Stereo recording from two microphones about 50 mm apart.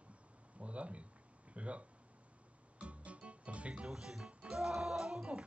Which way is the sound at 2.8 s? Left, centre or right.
Right.